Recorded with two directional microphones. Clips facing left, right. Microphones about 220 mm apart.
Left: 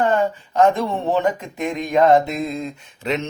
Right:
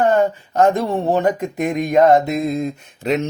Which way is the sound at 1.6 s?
40° right (ahead or behind).